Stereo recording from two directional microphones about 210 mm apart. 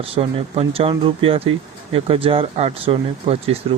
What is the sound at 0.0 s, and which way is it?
Speech, 25° right (ahead or behind).